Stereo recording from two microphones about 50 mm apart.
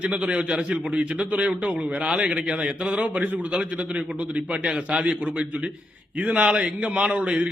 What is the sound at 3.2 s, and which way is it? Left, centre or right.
A man's voice, right.